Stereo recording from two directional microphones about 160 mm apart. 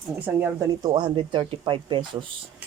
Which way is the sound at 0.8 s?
25° right (ahead or behind).